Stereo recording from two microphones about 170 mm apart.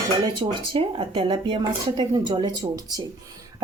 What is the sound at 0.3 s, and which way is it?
Speech, 30° right (ahead or behind).